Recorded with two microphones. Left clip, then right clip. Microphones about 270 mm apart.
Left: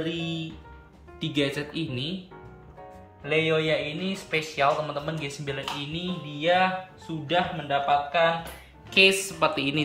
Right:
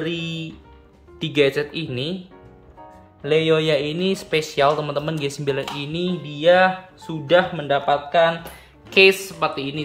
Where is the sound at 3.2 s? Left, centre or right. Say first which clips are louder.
Right 6 dB; right.